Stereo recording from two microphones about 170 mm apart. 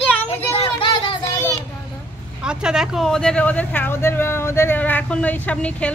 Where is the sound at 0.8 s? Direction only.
30° left (ahead or behind).